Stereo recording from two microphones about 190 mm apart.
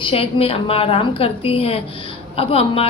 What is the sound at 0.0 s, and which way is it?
A woman's voice, 30° left (ahead or behind).